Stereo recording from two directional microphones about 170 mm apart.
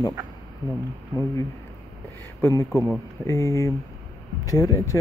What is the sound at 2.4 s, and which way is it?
Speech, 15° left (ahead or behind).